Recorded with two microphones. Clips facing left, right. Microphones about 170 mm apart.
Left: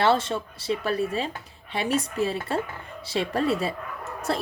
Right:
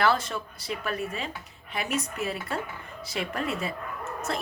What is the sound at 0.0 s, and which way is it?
Speech, 25° left (ahead or behind).